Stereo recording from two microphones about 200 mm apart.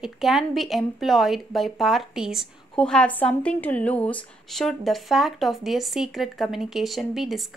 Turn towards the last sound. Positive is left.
turn(degrees=0)  # may be behind; listen again after turning